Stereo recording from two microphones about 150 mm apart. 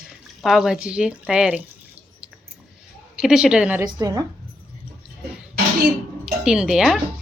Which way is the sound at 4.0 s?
25° right (ahead or behind).